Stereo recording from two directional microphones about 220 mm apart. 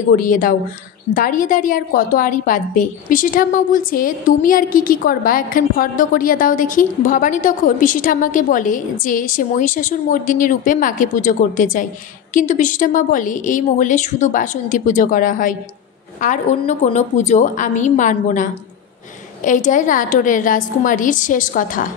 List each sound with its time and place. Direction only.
0.1 s a woman's voice: 40° left (ahead or behind)